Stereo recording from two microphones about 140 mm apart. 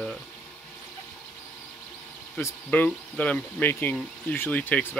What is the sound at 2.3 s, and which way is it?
Speech, 15° left (ahead or behind).